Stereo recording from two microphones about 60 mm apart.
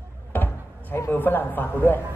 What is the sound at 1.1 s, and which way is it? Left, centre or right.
Speech, left.